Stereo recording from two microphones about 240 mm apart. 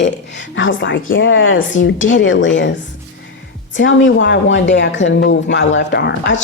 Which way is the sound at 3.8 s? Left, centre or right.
Left.